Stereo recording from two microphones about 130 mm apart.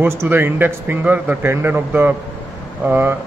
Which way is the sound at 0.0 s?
20° right (ahead or behind).